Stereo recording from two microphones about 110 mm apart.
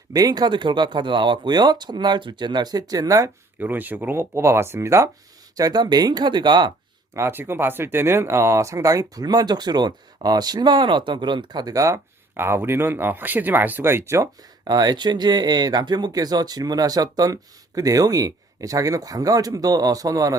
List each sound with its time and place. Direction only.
0.1 s speech: 35° right (ahead or behind)
3.6 s speech: 15° right (ahead or behind)
5.5 s speech: 35° right (ahead or behind)
7.1 s speech: 20° right (ahead or behind)
14.7 s speech: 40° right (ahead or behind)